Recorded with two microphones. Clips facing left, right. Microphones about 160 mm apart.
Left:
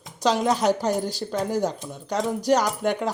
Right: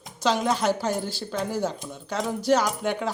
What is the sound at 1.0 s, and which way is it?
Speech, 40° left (ahead or behind).